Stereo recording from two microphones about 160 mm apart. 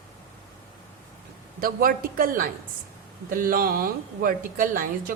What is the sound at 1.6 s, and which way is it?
A woman's voice, 65° right (ahead or behind).